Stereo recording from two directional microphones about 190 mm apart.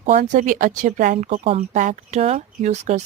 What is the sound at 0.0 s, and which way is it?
Speech, 40° right (ahead or behind).